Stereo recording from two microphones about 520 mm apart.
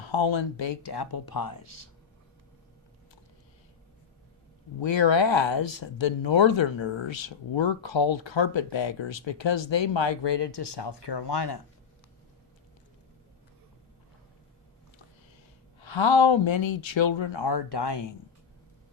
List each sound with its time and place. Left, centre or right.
0.0 s speech: left
4.8 s speech: left
15.8 s speech: left